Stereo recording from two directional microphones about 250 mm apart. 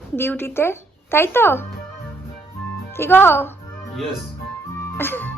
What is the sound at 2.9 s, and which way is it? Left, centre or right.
Speech, centre.